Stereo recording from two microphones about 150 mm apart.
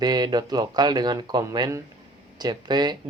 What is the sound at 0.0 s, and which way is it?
Speech, 25° right (ahead or behind).